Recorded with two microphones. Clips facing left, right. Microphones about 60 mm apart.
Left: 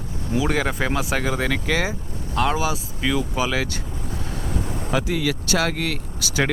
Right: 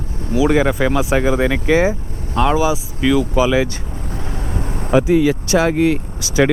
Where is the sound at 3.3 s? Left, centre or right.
Centre.